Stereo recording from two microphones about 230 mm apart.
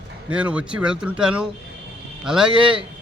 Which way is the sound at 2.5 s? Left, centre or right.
Right.